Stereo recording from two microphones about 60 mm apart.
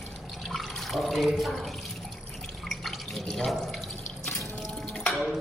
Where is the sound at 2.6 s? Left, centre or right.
Centre.